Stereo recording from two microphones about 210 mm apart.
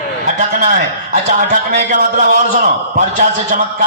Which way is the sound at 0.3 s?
35° right (ahead or behind).